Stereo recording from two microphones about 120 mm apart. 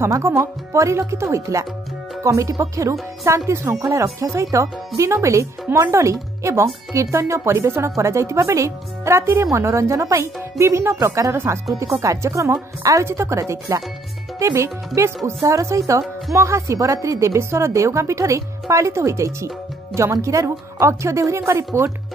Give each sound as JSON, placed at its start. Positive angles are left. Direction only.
{"t": 0.0, "sound": "a woman's voice", "side_deg": -20}